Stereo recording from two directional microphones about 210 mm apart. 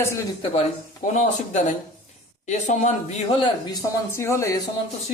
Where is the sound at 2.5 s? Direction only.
35° left (ahead or behind).